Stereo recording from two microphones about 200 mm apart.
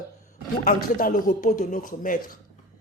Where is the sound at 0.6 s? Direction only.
40° left (ahead or behind).